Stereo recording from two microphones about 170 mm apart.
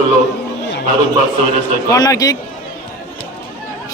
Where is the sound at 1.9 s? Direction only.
20° left (ahead or behind).